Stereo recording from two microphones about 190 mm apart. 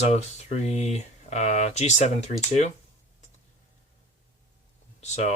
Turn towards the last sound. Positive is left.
turn(degrees=35)  # may be behind; listen again after turning